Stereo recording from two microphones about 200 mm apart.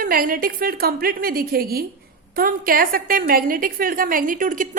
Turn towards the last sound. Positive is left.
turn(degrees=-40)  # may be behind; listen again after turning